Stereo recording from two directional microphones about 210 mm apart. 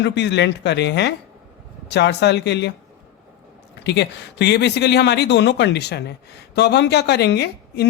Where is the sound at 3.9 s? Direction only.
55° left (ahead or behind).